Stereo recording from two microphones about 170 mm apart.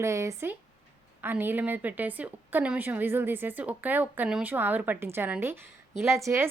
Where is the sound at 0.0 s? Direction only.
15° right (ahead or behind).